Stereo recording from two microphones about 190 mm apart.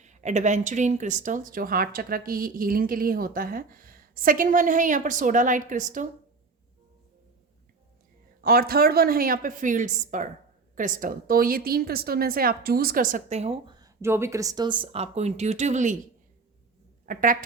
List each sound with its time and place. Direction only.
0.0 s speech: 40° right (ahead or behind)
8.4 s a woman's voice: 50° right (ahead or behind)
17.1 s speech: 45° right (ahead or behind)